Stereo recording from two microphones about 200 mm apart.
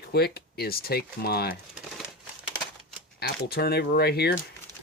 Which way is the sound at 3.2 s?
50° left (ahead or behind).